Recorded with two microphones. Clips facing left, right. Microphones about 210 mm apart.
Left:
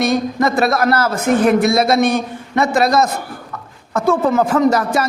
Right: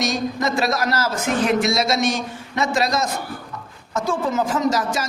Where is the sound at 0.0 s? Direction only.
60° left (ahead or behind).